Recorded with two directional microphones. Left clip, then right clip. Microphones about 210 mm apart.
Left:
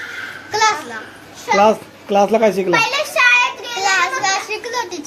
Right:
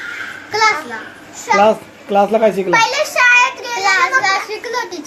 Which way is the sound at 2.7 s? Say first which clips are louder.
Right 3 dB; 10° right (ahead or behind).